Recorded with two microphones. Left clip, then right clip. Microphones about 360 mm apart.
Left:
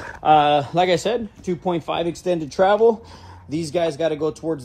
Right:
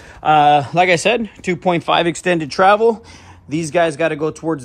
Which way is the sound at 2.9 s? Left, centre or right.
Right.